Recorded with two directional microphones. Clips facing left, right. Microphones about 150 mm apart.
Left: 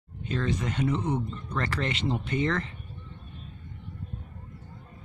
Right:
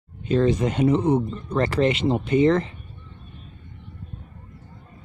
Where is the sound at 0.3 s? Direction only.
25° right (ahead or behind).